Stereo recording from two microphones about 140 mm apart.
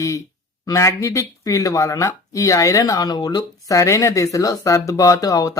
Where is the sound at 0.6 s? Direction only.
20° left (ahead or behind).